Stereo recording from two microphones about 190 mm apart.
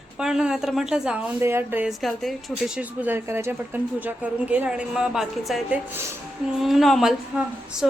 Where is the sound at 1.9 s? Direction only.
Centre (ahead or behind).